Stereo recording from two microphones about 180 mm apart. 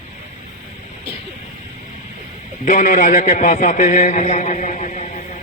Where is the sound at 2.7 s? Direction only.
40° left (ahead or behind).